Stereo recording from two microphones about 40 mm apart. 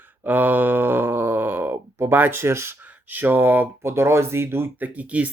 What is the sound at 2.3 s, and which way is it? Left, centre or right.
Speech, right.